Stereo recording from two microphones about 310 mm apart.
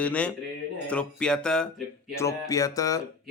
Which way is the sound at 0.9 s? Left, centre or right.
Centre.